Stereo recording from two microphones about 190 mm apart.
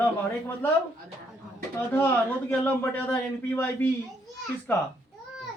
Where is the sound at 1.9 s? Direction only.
10° left (ahead or behind).